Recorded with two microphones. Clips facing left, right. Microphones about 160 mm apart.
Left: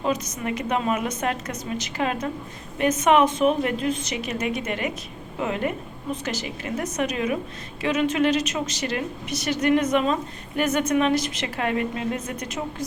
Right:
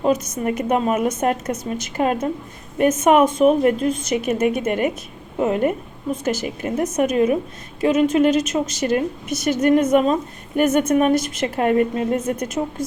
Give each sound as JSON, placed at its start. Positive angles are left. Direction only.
{"t": 0.0, "sound": "a woman's voice", "side_deg": -45}
{"t": 12.6, "sound": "a woman's voice", "side_deg": -25}